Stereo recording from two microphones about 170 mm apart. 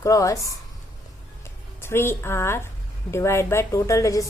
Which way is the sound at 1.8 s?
15° left (ahead or behind).